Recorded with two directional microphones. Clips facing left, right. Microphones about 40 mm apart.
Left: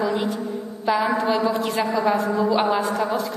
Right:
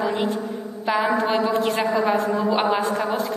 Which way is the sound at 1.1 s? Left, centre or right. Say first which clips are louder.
Even; right.